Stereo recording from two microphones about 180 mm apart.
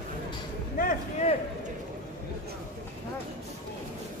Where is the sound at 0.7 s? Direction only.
50° left (ahead or behind).